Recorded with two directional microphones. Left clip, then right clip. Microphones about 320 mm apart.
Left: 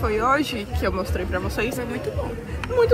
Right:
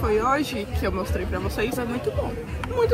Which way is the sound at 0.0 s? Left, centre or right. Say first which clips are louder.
Left 1 dB; centre.